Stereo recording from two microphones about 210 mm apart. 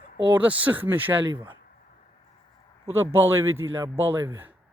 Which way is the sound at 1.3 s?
20° right (ahead or behind).